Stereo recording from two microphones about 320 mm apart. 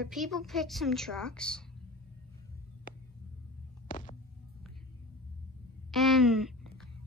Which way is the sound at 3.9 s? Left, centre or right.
Left.